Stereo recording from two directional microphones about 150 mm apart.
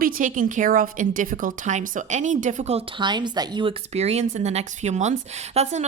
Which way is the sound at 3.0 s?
30° right (ahead or behind).